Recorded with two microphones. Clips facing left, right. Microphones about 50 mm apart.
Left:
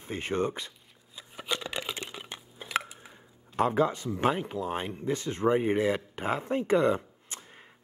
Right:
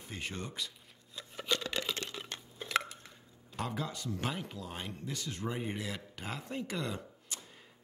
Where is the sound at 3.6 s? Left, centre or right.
Left.